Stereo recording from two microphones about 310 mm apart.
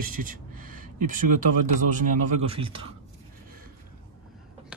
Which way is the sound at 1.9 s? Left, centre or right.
Centre.